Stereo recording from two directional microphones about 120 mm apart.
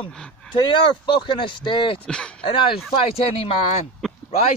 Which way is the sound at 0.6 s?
40° left (ahead or behind).